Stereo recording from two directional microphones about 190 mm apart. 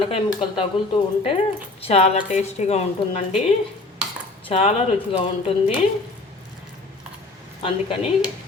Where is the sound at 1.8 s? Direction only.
30° left (ahead or behind).